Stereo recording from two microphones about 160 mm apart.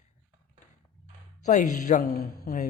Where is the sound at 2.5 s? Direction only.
65° left (ahead or behind).